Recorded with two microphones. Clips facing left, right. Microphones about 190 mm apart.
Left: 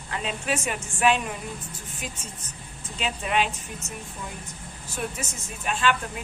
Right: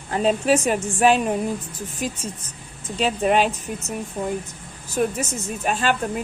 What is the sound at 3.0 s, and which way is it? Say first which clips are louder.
Speech: right 7 dB; 40° right (ahead or behind).